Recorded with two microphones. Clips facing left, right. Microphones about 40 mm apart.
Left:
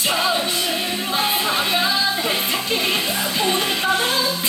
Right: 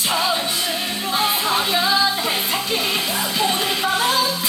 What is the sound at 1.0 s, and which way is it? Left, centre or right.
Music, centre.